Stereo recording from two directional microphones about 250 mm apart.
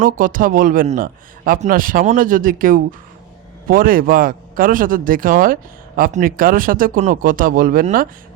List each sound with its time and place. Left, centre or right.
0.0 s a man's voice: right